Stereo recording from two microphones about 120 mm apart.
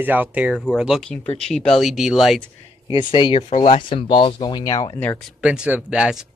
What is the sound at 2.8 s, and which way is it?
Speech, 40° left (ahead or behind).